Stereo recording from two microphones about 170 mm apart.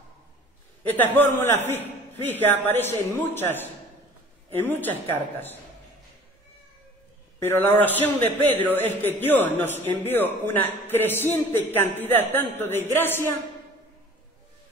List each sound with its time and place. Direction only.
0.9 s a man's voice: 10° left (ahead or behind)
7.3 s a man's voice: 10° left (ahead or behind)